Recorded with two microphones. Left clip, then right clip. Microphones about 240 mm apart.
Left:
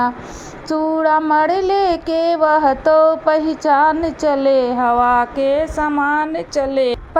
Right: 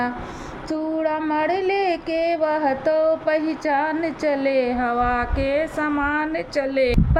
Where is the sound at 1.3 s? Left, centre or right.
Centre.